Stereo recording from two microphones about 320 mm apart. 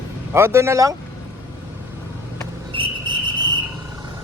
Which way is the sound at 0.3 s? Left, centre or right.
Centre.